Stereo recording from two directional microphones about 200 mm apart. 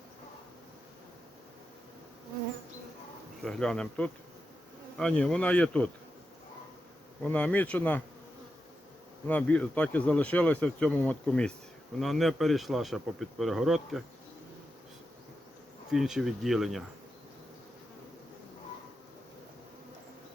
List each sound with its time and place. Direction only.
3.4 s speech: 5° left (ahead or behind)
7.3 s speech: 5° left (ahead or behind)
9.2 s speech: 5° left (ahead or behind)
15.9 s speech: centre (ahead or behind)